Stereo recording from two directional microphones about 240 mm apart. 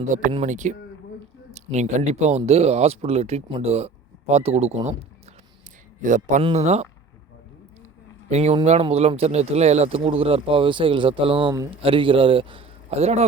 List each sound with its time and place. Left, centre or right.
0.1 s speech: right
6.0 s speech: right
8.3 s speech: right